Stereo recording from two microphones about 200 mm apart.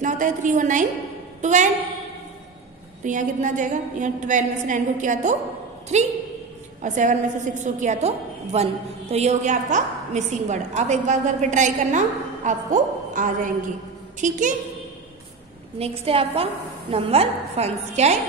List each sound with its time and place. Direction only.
0.0 s a woman's voice: 40° right (ahead or behind)
3.0 s a woman's voice: 40° right (ahead or behind)
15.8 s a woman's voice: 30° right (ahead or behind)